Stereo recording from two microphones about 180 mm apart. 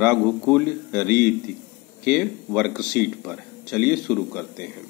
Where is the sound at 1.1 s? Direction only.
65° right (ahead or behind).